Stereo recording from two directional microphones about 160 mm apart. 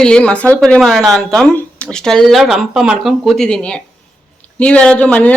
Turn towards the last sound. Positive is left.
turn(degrees=10)  # may be behind; listen again after turning